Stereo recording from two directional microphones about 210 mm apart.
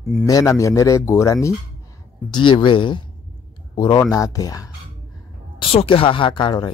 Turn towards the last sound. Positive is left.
turn(degrees=20)  # may be behind; listen again after turning